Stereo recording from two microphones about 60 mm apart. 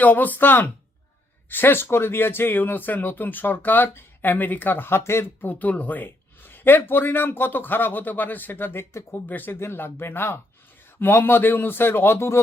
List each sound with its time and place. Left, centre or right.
0.0 s speech: left
5.5 s speech: left
9.1 s speech: left